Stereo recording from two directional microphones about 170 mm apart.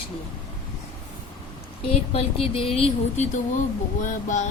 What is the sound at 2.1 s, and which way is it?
Speech, 35° left (ahead or behind).